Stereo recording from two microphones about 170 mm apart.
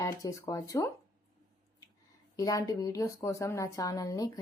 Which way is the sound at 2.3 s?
20° left (ahead or behind).